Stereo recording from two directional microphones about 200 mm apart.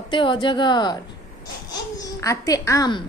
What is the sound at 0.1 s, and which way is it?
A woman's voice, 25° left (ahead or behind).